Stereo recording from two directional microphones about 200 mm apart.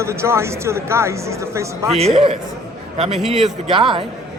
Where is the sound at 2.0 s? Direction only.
30° right (ahead or behind).